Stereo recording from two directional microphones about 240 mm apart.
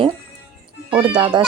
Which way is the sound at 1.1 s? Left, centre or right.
Centre.